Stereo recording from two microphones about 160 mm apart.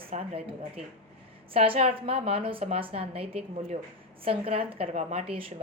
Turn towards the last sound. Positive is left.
turn(degrees=-45)  # may be behind; listen again after turning